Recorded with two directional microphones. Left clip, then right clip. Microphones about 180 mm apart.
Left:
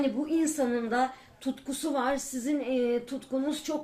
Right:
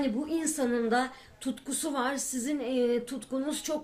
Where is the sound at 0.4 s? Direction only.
50° right (ahead or behind).